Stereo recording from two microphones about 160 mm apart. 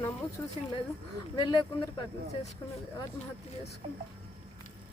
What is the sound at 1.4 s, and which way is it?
Speech, 30° left (ahead or behind).